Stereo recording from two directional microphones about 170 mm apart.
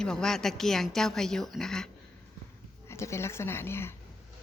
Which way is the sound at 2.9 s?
15° left (ahead or behind).